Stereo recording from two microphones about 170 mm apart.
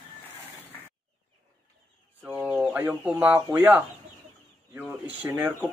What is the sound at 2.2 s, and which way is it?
Speech, 5° right (ahead or behind).